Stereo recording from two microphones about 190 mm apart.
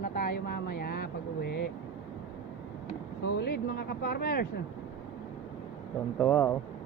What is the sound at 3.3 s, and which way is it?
Speech, 60° left (ahead or behind).